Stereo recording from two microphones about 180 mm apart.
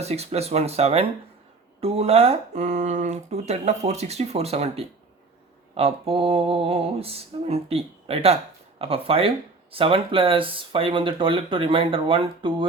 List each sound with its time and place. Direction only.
0.0 s speech: 35° right (ahead or behind)